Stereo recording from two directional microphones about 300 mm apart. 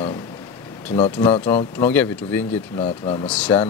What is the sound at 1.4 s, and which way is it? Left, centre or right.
Speech, centre.